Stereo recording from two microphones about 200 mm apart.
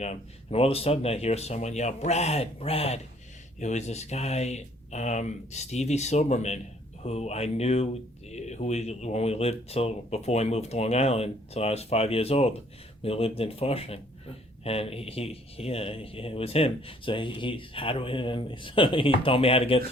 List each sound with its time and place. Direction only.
0.0 s speech: 30° left (ahead or behind)